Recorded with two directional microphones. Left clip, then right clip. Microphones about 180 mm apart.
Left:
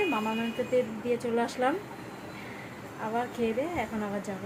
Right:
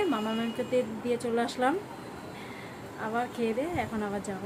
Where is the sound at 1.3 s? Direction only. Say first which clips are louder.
Right 1 dB; centre (ahead or behind).